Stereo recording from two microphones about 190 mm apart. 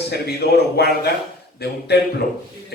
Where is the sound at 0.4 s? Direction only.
55° left (ahead or behind).